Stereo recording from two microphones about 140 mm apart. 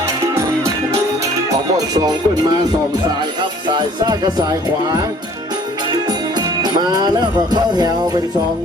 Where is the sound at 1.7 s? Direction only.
25° right (ahead or behind).